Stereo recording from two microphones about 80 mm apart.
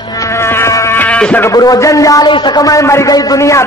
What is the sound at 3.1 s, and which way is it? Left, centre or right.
Speech, left.